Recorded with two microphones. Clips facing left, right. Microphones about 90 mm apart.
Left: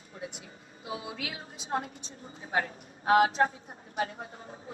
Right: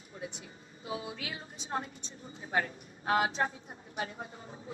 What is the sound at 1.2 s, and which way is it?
A woman's voice, 50° left (ahead or behind).